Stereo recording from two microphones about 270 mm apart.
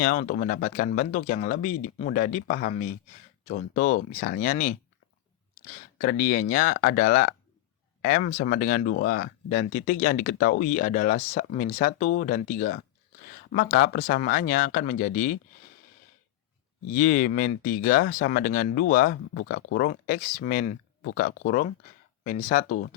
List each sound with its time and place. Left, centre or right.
0.0 s speech: left
6.0 s speech: left
16.9 s speech: left